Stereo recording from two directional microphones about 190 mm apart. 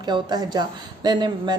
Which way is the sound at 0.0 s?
25° right (ahead or behind).